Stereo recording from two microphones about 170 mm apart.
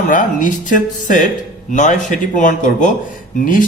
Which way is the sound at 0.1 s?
50° left (ahead or behind).